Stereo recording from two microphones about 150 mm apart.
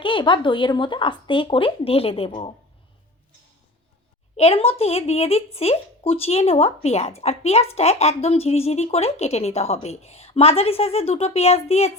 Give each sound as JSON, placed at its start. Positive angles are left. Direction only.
{"t": 0.0, "sound": "speech", "side_deg": 35}
{"t": 4.4, "sound": "a woman's voice", "side_deg": 40}